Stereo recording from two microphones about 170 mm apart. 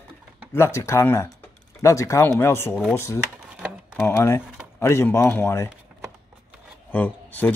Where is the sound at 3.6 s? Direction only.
5° right (ahead or behind).